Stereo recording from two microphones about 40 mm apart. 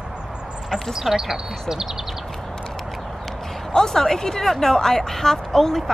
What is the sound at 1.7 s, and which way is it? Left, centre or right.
Bird, centre.